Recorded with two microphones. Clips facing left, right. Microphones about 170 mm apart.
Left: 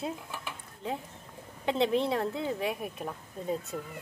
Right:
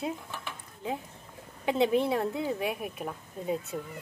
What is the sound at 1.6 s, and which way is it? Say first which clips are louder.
Speech: right 2 dB; 5° right (ahead or behind).